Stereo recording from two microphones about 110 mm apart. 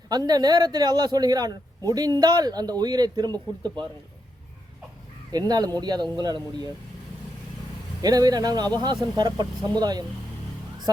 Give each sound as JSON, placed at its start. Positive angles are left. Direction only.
{"t": 0.1, "sound": "speech", "side_deg": -40}
{"t": 5.3, "sound": "speech", "side_deg": -35}
{"t": 8.0, "sound": "speech", "side_deg": -35}